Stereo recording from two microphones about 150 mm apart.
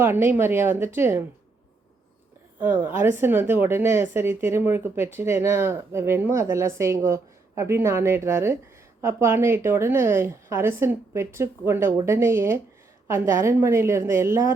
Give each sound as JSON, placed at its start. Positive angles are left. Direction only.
{"t": 0.0, "sound": "speech", "side_deg": -15}
{"t": 2.6, "sound": "a woman's voice", "side_deg": -15}